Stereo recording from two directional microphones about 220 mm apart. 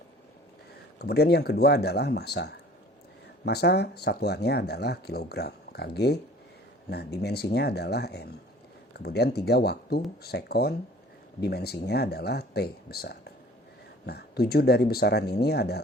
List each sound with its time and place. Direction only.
0.9 s speech: 45° left (ahead or behind)